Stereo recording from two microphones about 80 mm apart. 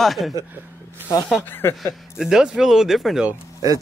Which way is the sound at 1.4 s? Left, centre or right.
Left.